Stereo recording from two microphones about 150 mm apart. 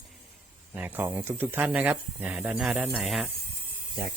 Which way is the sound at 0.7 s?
10° right (ahead or behind).